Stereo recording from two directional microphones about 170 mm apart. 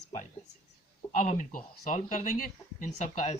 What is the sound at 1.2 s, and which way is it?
Speech, 45° left (ahead or behind).